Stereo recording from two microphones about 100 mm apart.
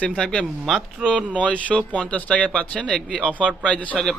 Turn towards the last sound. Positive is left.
turn(degrees=10)  # may be behind; listen again after turning